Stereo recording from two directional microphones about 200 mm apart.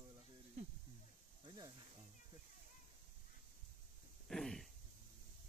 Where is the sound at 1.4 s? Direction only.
20° right (ahead or behind).